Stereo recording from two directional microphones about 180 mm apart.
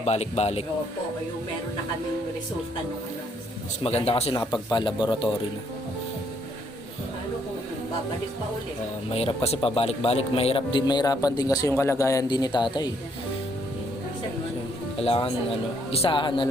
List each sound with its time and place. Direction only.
0.0 s speech: 35° left (ahead or behind)
3.8 s speech: 35° left (ahead or behind)
9.0 s speech: 35° left (ahead or behind)
14.9 s speech: 30° left (ahead or behind)